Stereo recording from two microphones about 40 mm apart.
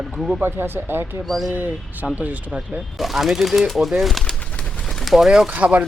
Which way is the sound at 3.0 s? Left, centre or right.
Centre.